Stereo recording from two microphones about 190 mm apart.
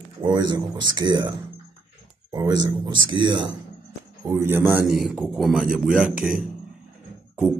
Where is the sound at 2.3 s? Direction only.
20° right (ahead or behind).